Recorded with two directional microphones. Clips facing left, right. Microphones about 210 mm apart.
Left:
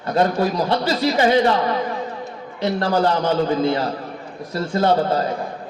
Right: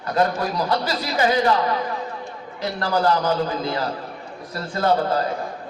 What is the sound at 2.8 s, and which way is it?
A man's voice, 25° left (ahead or behind).